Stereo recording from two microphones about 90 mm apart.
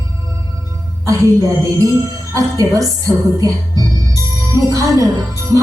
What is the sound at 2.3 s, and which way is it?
Speech, 35° right (ahead or behind).